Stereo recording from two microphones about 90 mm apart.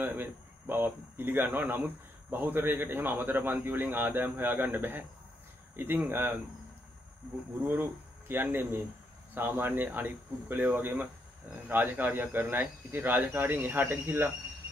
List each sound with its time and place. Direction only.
0.0 s speech: 25° right (ahead or behind)
6.0 s speech: 20° right (ahead or behind)
7.6 s speech: 25° right (ahead or behind)